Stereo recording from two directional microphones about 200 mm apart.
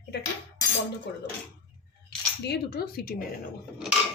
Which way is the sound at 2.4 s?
55° left (ahead or behind).